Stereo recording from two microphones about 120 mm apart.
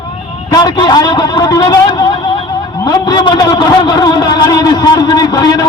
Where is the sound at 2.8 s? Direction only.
40° left (ahead or behind).